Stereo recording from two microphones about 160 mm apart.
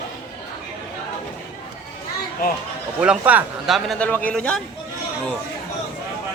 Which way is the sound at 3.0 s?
10° right (ahead or behind).